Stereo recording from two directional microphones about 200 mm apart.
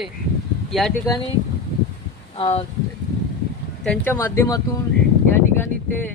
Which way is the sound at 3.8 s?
5° left (ahead or behind).